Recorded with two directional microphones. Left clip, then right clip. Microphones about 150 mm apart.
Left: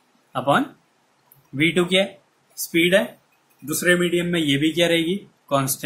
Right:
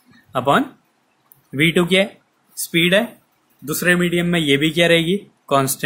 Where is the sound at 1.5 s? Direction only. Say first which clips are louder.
Right 3 dB; 50° right (ahead or behind).